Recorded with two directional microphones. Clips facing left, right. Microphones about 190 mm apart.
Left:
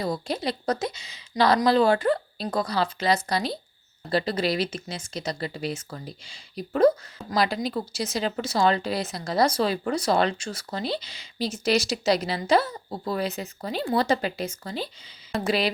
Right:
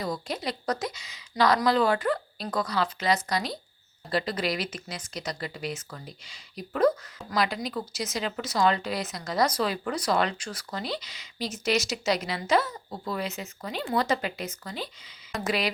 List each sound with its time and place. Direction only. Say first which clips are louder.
0.0 s a woman's voice: left 4 dB; 30° left (ahead or behind)